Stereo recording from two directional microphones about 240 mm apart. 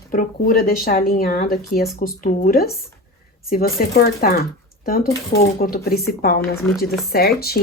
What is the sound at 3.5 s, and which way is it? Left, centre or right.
Speech, left.